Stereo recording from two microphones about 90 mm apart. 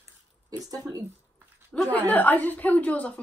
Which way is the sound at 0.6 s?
45° right (ahead or behind).